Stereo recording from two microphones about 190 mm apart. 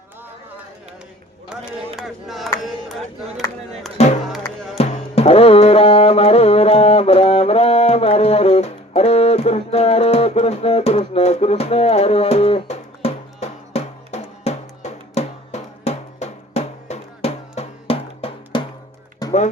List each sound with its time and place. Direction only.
2.0 s speech: centre (ahead or behind)
3.9 s music: 35° left (ahead or behind)
19.2 s music: 20° left (ahead or behind)